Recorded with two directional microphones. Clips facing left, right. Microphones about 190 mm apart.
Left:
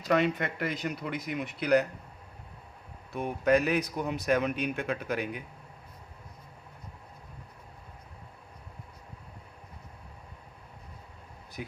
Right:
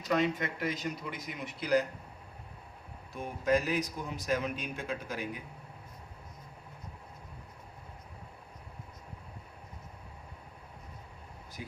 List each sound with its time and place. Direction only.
0.1 s a man's voice: 60° left (ahead or behind)
3.1 s a man's voice: 65° left (ahead or behind)